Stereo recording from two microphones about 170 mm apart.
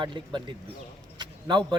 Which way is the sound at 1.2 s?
25° right (ahead or behind).